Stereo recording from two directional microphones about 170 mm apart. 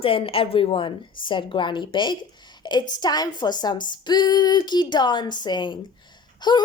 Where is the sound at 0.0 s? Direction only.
35° left (ahead or behind).